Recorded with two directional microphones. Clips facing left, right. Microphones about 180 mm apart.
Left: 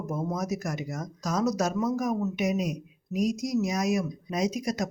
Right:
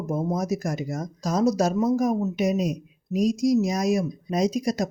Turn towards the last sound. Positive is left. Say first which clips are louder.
# right 5 dB
turn(degrees=-35)  # may be behind; listen again after turning